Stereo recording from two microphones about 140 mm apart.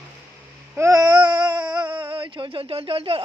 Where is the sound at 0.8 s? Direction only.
25° right (ahead or behind).